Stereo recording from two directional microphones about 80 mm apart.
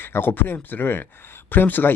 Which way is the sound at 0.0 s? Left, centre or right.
Left.